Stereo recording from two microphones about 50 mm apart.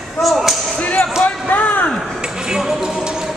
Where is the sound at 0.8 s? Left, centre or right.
Left.